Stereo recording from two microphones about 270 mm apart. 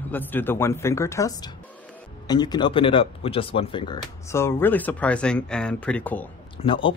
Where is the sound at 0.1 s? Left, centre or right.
Centre.